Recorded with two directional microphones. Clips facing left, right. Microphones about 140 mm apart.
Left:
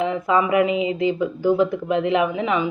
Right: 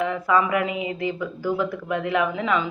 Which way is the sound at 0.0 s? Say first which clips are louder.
Left 2 dB; 20° left (ahead or behind).